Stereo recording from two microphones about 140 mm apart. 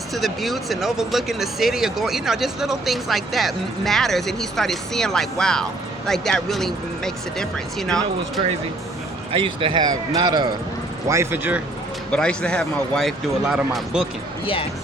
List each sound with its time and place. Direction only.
0.1 s speech: centre (ahead or behind)
9.3 s speech: 40° right (ahead or behind)
11.1 s speech: 20° right (ahead or behind)
12.1 s speech: 5° left (ahead or behind)